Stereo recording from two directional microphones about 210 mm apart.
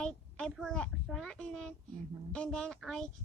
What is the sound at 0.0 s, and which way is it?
A child's voice, 5° left (ahead or behind).